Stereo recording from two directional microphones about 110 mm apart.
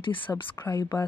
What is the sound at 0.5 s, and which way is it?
Speech, 20° left (ahead or behind).